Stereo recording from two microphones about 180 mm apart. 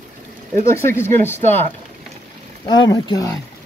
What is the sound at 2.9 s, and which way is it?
Speech, 20° left (ahead or behind).